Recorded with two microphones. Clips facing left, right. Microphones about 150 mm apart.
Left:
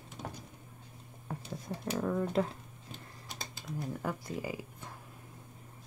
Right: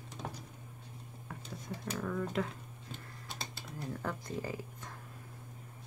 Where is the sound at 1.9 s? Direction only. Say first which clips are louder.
Left 5 dB; 35° left (ahead or behind).